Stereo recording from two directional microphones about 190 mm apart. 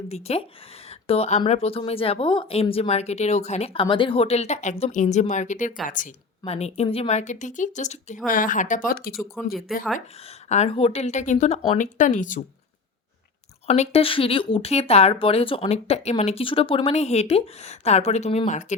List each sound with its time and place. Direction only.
0.1 s speech: 35° left (ahead or behind); by 9.2 s 50° left (ahead or behind)
9.3 s speech: centre (ahead or behind)
10.2 s speech: 35° left (ahead or behind)
13.7 s speech: 35° left (ahead or behind)